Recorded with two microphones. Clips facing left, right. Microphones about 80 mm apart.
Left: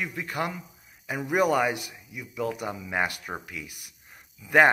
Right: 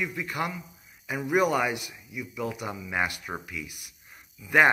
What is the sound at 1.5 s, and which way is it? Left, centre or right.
Speech, left.